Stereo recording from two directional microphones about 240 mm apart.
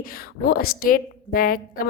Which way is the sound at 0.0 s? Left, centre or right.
Left.